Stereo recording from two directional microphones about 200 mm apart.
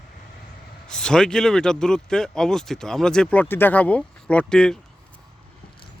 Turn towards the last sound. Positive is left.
turn(degrees=5)  # may be behind; listen again after turning